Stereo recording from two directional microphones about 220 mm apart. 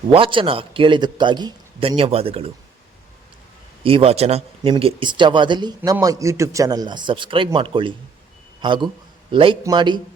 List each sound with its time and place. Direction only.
0.1 s speech: 25° right (ahead or behind)
3.8 s speech: 25° right (ahead or behind)